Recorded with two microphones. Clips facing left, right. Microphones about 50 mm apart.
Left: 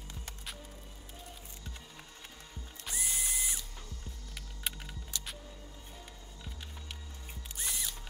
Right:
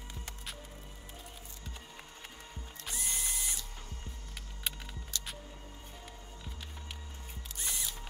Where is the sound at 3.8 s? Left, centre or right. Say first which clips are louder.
Right 1 dB; right.